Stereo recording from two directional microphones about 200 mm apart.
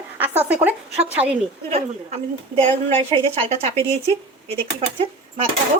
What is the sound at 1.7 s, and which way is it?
Speech, 30° right (ahead or behind).